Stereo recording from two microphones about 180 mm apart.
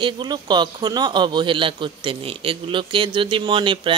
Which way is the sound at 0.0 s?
25° right (ahead or behind).